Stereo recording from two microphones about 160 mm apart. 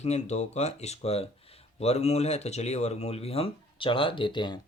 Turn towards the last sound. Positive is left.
turn(degrees=30)  # may be behind; listen again after turning